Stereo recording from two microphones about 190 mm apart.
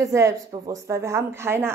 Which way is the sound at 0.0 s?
15° right (ahead or behind).